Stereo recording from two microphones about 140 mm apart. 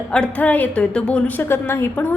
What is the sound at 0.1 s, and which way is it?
A woman's voice, 10° left (ahead or behind).